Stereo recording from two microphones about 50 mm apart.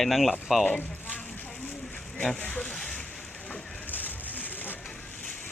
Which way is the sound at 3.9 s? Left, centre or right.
Left.